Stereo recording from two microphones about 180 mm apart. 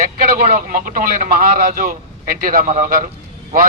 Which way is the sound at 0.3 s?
50° right (ahead or behind).